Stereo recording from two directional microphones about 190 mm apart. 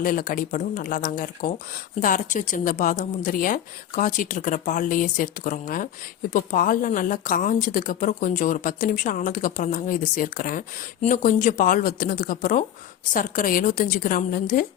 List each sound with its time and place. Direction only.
0.0 s speech: 45° left (ahead or behind)